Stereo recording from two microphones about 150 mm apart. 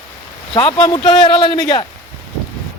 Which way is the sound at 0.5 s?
30° left (ahead or behind).